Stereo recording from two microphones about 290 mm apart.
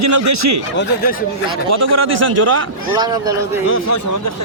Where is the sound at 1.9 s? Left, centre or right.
Right.